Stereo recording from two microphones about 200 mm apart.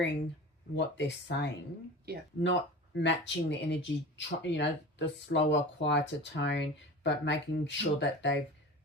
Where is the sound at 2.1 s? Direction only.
50° right (ahead or behind).